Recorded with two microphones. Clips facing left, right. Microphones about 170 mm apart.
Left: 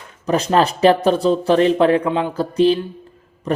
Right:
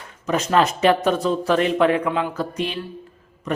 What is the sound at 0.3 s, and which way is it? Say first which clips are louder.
Speech: left 3 dB; 35° left (ahead or behind).